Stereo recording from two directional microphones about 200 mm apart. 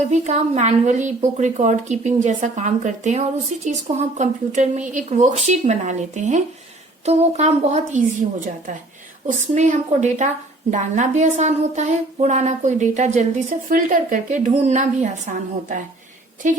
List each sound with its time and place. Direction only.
0.1 s speech: 35° right (ahead or behind)
9.2 s speech: 35° right (ahead or behind)